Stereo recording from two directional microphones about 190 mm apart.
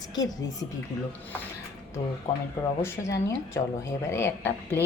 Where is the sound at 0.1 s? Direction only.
20° left (ahead or behind).